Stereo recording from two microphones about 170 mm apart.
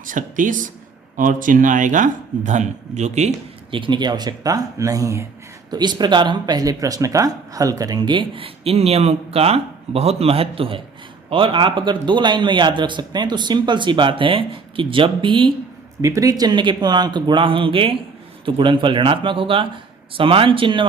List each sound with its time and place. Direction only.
0.0 s speech: 50° right (ahead or behind); by 15.5 s 30° right (ahead or behind)
16.0 s speech: 20° right (ahead or behind)